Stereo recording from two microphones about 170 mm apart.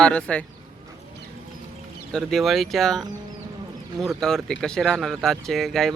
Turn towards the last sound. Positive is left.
turn(degrees=0)  # may be behind; listen again after turning